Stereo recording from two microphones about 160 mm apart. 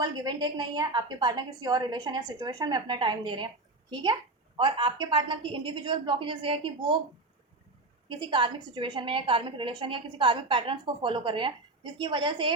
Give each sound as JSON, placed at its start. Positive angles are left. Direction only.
{"t": 0.0, "sound": "a woman's voice", "side_deg": -25}
{"t": 8.0, "sound": "a woman's voice", "side_deg": -30}